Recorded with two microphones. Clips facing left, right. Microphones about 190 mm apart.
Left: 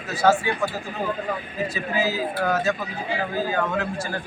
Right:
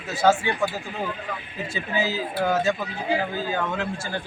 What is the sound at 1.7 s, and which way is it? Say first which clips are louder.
A man's voice: right 1 dB; 25° right (ahead or behind).